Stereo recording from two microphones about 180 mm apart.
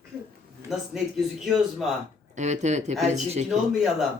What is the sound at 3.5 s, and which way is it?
Speech, centre (ahead or behind).